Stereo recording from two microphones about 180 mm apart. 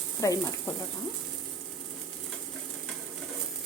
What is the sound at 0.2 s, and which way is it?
Speech, 20° left (ahead or behind).